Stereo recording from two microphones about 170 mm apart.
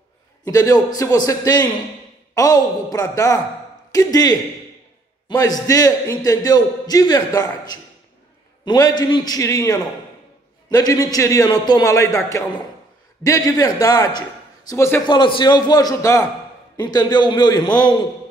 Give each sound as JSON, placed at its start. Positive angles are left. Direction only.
{"t": 0.4, "sound": "a man's voice", "side_deg": 20}
{"t": 15.0, "sound": "a man's voice", "side_deg": 30}